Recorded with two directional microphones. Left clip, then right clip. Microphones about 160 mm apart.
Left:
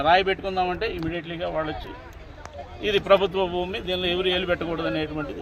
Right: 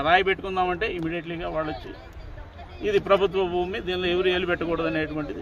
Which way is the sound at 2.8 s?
Centre (ahead or behind).